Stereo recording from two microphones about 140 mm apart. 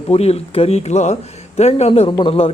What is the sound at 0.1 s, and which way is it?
Speech, 50° left (ahead or behind).